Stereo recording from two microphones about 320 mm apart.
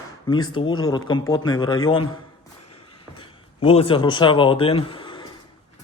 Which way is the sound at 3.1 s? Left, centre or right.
Centre.